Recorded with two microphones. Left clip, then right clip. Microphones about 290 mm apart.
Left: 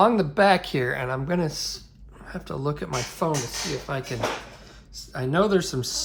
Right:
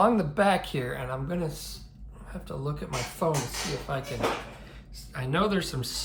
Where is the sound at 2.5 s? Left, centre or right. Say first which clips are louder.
Left 6 dB; centre.